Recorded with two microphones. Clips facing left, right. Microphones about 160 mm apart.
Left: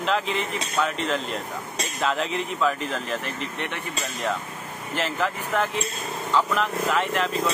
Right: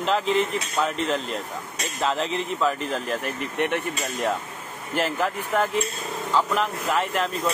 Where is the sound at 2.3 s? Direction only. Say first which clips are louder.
Even; centre (ahead or behind).